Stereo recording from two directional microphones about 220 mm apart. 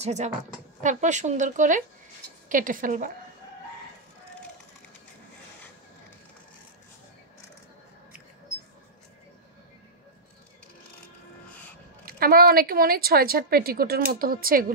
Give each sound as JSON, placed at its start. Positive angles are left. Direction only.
{"t": 0.0, "sound": "speech", "side_deg": -30}
{"t": 12.1, "sound": "speech", "side_deg": -40}